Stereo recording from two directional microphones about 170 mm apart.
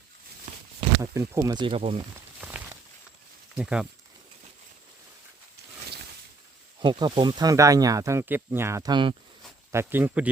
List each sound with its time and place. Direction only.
0.8 s speech: 20° right (ahead or behind)
2.4 s walk: 15° right (ahead or behind)
3.5 s speech: 5° right (ahead or behind)
6.7 s speech: 25° right (ahead or behind)
9.7 s speech: 10° right (ahead or behind)